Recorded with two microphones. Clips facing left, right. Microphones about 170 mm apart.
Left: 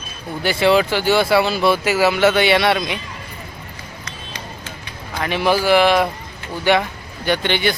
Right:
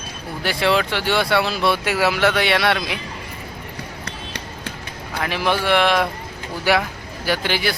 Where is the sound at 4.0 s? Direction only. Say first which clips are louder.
Right 1 dB; 65° right (ahead or behind).